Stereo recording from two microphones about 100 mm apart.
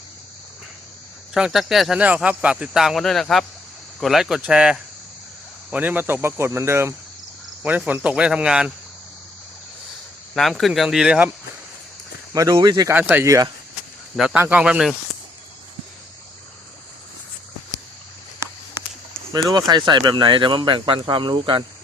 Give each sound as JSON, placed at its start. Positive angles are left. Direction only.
{"t": 1.3, "sound": "speech", "side_deg": -5}
{"t": 2.0, "sound": "speech", "side_deg": -15}
{"t": 7.9, "sound": "speech", "side_deg": -15}
{"t": 10.3, "sound": "speech", "side_deg": 0}
{"t": 12.3, "sound": "speech", "side_deg": -40}
{"t": 12.9, "sound": "speech", "side_deg": -15}
{"t": 13.2, "sound": "speech", "side_deg": -35}
{"t": 14.3, "sound": "speech", "side_deg": -15}
{"t": 18.3, "sound": "a sound", "side_deg": -25}
{"t": 19.3, "sound": "speech", "side_deg": -45}